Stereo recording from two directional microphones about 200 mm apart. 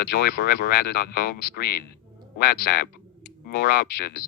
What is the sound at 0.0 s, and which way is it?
Speech, 55° left (ahead or behind).